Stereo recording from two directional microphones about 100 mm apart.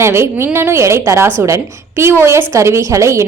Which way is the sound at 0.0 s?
25° right (ahead or behind).